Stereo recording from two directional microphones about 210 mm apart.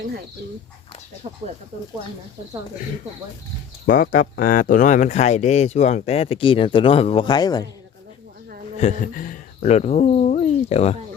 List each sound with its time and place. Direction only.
1.2 s speech: 30° right (ahead or behind)
3.8 s speech: 40° left (ahead or behind); by 7.7 s 20° left (ahead or behind)
8.8 s speech: 40° left (ahead or behind)